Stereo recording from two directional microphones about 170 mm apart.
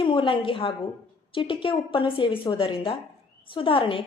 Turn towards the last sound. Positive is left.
turn(degrees=30)  # may be behind; listen again after turning